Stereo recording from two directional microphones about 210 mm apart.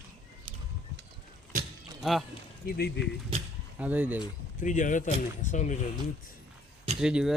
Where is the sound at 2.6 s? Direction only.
50° left (ahead or behind).